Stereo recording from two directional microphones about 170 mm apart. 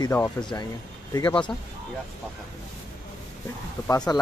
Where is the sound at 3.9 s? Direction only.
20° left (ahead or behind).